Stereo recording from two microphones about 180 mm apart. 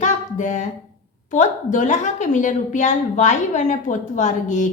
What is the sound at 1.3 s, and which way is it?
A child's voice, 45° left (ahead or behind).